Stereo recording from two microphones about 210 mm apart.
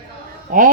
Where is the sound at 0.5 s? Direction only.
40° right (ahead or behind).